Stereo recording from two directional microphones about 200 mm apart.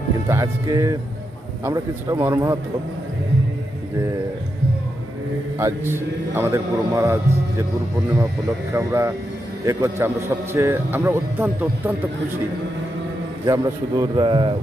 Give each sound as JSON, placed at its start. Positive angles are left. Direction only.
{"t": 0.3, "sound": "a man's voice", "side_deg": -15}
{"t": 5.6, "sound": "a man's voice", "side_deg": -10}
{"t": 8.7, "sound": "a man's voice", "side_deg": -15}
{"t": 13.5, "sound": "a man's voice", "side_deg": -20}